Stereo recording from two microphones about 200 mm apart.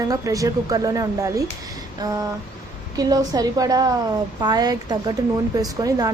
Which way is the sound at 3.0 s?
20° right (ahead or behind).